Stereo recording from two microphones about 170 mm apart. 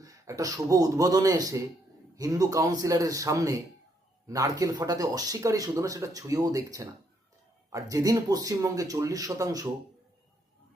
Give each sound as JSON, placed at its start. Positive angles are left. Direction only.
{"t": 0.0, "sound": "speech", "side_deg": -20}